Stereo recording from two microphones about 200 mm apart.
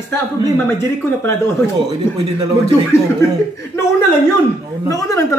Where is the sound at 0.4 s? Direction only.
15° left (ahead or behind).